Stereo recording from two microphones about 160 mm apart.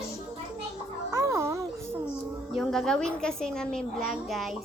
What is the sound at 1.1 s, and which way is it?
Music, 20° right (ahead or behind).